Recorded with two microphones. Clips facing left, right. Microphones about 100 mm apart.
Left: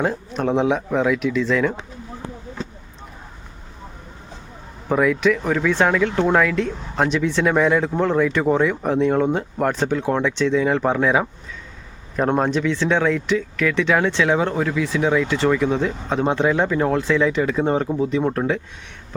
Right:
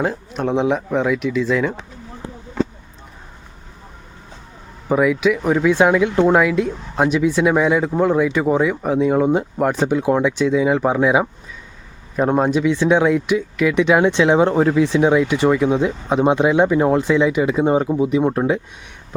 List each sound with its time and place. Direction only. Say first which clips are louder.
0.0 s speech: even; centre (ahead or behind)
4.9 s speech: right 2 dB; 5° right (ahead or behind)